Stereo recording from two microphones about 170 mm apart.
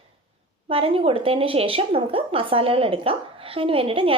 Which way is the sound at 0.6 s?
35° right (ahead or behind).